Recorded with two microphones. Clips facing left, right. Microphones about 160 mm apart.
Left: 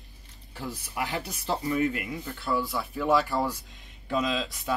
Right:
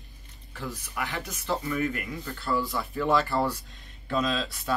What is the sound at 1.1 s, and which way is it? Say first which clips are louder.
Speech: right 1 dB; 35° left (ahead or behind).